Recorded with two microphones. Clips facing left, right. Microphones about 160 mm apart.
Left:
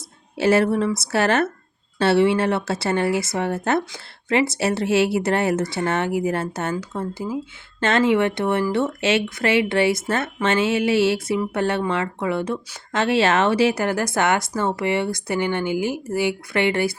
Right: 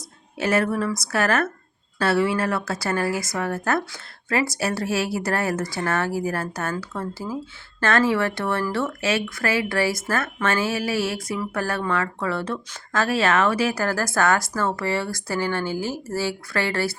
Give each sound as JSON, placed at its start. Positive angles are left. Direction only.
{"t": 0.3, "sound": "speech", "side_deg": 30}